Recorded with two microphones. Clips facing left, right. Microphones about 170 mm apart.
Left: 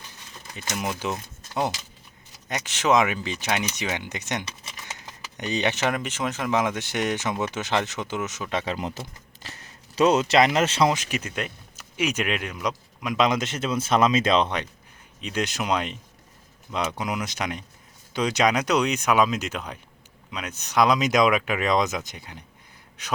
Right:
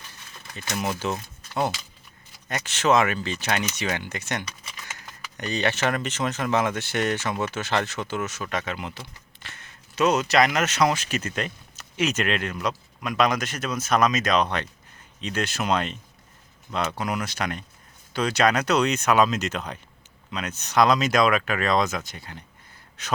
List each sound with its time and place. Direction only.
0.5 s speech: 15° left (ahead or behind)
2.5 s speech: 15° left (ahead or behind)
8.6 s speech: 35° left (ahead or behind)
15.2 s speech: 15° left (ahead or behind)
17.0 s speech: 15° left (ahead or behind)